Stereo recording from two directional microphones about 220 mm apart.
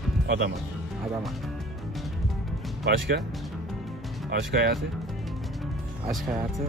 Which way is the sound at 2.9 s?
50° right (ahead or behind).